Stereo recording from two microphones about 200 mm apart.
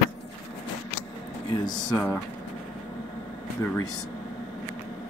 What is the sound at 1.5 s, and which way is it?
Speech, 20° left (ahead or behind).